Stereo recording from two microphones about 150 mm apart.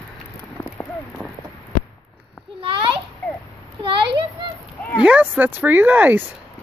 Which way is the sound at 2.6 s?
35° right (ahead or behind).